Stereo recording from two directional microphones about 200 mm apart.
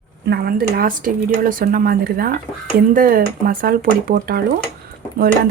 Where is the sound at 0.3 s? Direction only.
50° right (ahead or behind).